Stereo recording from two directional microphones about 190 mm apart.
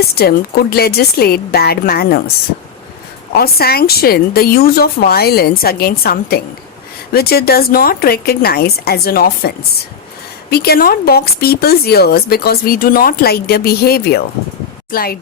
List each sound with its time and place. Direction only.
0.2 s speech: 55° left (ahead or behind)
3.3 s speech: 55° left (ahead or behind)
10.5 s speech: 55° left (ahead or behind)